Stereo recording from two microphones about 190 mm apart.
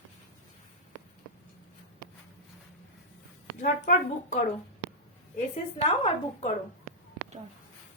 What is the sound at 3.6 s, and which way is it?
A woman's voice, 45° left (ahead or behind).